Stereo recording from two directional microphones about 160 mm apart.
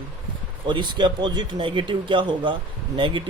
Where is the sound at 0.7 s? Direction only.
30° right (ahead or behind).